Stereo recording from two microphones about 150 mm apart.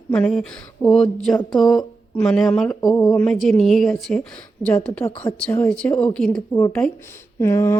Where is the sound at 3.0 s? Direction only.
20° left (ahead or behind).